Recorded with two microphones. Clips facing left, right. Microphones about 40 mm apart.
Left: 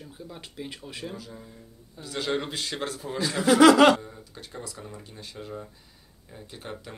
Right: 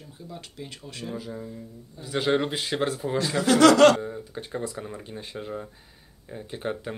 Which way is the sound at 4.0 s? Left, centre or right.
Right.